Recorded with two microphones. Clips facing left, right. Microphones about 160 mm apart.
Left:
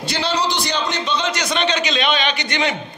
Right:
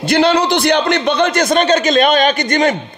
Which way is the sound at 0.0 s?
55° right (ahead or behind).